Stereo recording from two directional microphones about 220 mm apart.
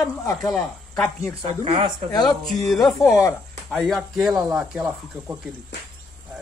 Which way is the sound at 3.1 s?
10° left (ahead or behind).